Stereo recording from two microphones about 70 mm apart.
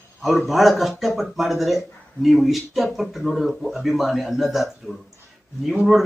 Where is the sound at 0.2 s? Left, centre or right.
Centre.